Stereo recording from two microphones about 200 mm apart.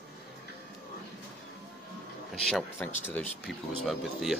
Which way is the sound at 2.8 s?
5° left (ahead or behind).